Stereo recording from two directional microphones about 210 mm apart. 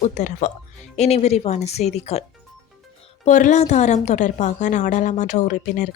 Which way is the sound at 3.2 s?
35° left (ahead or behind).